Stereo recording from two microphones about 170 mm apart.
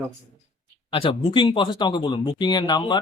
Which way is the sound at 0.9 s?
30° left (ahead or behind).